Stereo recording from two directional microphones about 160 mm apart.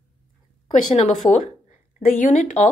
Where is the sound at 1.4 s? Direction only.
55° left (ahead or behind).